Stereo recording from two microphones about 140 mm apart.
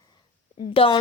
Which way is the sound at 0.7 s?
40° left (ahead or behind).